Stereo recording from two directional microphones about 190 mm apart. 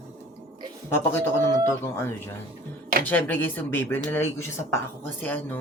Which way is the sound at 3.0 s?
10° left (ahead or behind).